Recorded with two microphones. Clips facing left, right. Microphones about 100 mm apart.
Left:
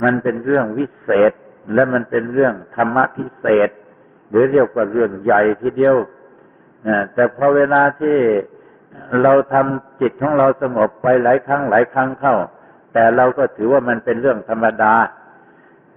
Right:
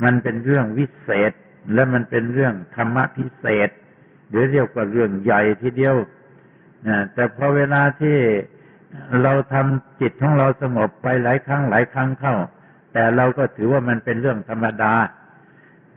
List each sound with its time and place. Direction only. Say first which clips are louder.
0.0 s a man's voice: left 2 dB; 30° left (ahead or behind)